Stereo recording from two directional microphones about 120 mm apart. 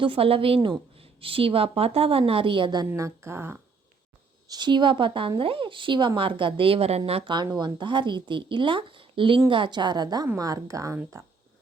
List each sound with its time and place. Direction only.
0.0 s a woman's voice: 50° right (ahead or behind)
2.9 s a woman's voice: 25° right (ahead or behind)
4.4 s a woman's voice: 35° right (ahead or behind)
7.3 s a woman's voice: 40° right (ahead or behind)